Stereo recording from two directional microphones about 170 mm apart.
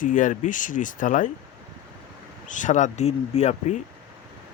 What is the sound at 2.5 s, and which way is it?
Speech, 50° left (ahead or behind).